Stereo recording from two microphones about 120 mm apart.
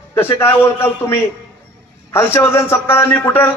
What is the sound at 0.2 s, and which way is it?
A man's voice, 20° left (ahead or behind).